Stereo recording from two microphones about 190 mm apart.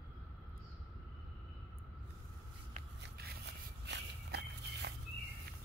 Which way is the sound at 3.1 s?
60° right (ahead or behind).